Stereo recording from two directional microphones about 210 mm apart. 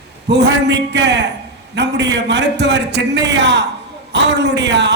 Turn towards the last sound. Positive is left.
turn(degrees=-55)  # may be behind; listen again after turning